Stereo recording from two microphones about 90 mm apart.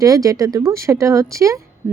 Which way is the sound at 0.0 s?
40° right (ahead or behind).